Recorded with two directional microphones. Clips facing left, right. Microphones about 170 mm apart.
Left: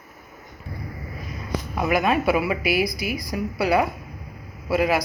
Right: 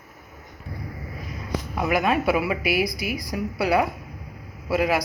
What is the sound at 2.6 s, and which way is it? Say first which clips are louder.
Speech: left 1 dB; 30° left (ahead or behind).